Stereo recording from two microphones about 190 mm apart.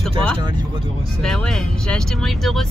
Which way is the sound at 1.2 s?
5° left (ahead or behind).